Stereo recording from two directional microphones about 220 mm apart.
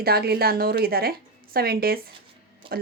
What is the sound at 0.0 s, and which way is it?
Speech, 45° right (ahead or behind).